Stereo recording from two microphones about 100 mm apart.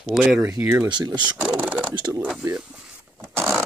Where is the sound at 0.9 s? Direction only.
45° right (ahead or behind).